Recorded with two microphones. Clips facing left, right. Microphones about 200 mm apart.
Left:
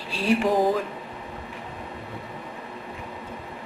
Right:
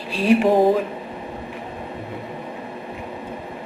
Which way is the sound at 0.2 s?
25° right (ahead or behind).